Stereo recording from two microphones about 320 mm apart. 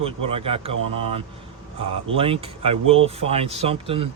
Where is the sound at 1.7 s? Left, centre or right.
Centre.